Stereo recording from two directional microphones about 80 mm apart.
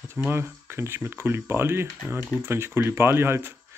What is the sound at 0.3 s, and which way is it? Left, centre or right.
Speech, right.